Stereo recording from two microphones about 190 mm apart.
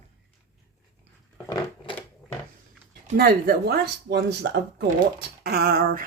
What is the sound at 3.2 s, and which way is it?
Speech, 55° right (ahead or behind).